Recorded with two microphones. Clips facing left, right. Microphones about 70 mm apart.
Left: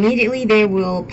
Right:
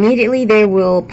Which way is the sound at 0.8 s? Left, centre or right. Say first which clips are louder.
Right 7 dB; right.